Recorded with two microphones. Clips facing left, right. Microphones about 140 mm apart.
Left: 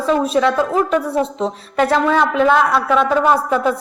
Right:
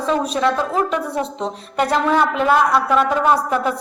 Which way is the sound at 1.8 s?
10° right (ahead or behind).